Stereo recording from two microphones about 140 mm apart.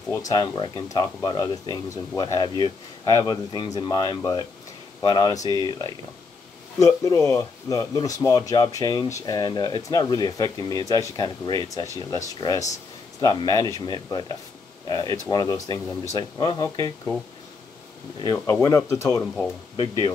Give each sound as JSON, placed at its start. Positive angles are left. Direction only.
{"t": 0.3, "sound": "speech", "side_deg": 30}
{"t": 15.2, "sound": "speech", "side_deg": 25}
{"t": 18.3, "sound": "speech", "side_deg": 25}